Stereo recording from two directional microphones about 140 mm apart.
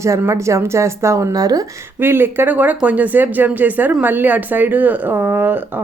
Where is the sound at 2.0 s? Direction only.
15° right (ahead or behind).